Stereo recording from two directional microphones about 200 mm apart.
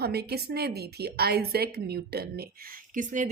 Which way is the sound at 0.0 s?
50° right (ahead or behind).